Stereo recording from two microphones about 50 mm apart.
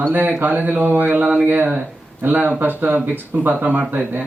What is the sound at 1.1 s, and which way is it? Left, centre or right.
Speech, right.